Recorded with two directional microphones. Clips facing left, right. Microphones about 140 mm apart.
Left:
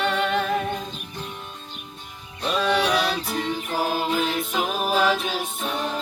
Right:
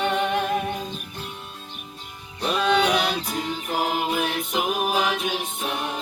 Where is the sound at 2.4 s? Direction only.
20° right (ahead or behind).